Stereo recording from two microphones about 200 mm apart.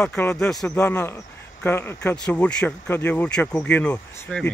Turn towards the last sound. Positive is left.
turn(degrees=5)  # may be behind; listen again after turning